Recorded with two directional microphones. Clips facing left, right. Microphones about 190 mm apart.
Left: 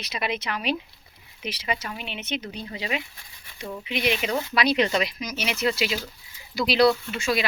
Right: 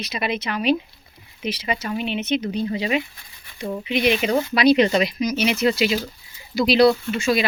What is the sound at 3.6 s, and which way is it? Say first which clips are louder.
Speech: right 7 dB; 25° right (ahead or behind).